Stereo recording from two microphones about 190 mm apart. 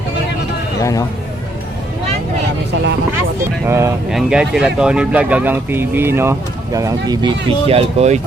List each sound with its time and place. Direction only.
0.8 s speech: 15° left (ahead or behind)
3.7 s speech: 15° right (ahead or behind)
4.1 s speech: 5° right (ahead or behind); by 8.2 s 35° right (ahead or behind)